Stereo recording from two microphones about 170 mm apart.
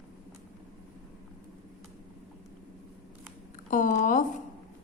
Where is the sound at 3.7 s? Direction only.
50° left (ahead or behind).